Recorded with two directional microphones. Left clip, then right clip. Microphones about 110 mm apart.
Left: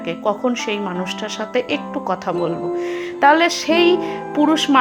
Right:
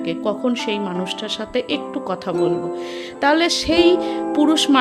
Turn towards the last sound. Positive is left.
turn(degrees=-40)  # may be behind; listen again after turning